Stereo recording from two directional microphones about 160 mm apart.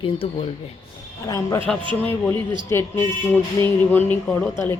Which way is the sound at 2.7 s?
15° left (ahead or behind).